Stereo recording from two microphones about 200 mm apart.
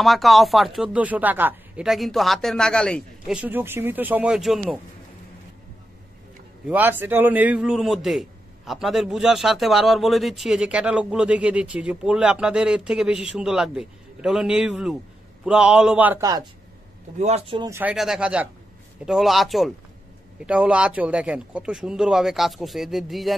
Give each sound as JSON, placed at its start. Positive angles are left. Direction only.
{"t": 0.0, "sound": "a man's voice", "side_deg": 0}
{"t": 6.7, "sound": "a man's voice", "side_deg": -10}
{"t": 17.2, "sound": "speech", "side_deg": -35}
{"t": 17.6, "sound": "speech", "side_deg": -15}
{"t": 17.9, "sound": "a man's voice", "side_deg": 0}